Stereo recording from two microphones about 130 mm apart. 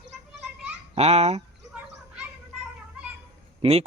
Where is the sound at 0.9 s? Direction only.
55° right (ahead or behind).